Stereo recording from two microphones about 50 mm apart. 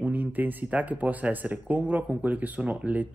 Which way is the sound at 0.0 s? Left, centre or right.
Right.